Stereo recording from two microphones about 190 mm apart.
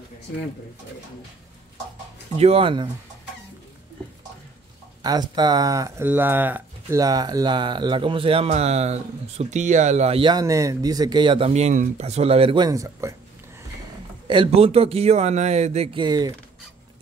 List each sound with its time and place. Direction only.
2.3 s speech: 30° right (ahead or behind)
5.0 s speech: 20° right (ahead or behind)
14.2 s speech: 25° right (ahead or behind)